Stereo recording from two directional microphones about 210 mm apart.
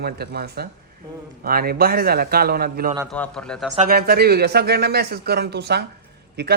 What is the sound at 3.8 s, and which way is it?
Speech, 50° right (ahead or behind).